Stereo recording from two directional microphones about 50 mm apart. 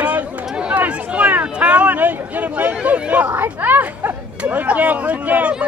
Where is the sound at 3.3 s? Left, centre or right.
Right.